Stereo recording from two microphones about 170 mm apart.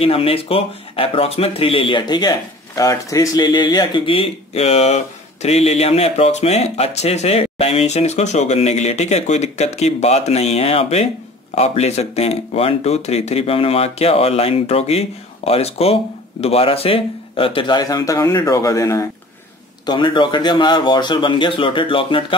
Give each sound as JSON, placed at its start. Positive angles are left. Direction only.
{"t": 0.0, "sound": "speech", "side_deg": 35}